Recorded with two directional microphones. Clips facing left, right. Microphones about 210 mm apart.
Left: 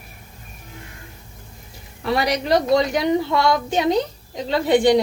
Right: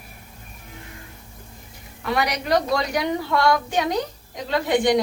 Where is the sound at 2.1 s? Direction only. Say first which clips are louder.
Left 3 dB; 30° left (ahead or behind).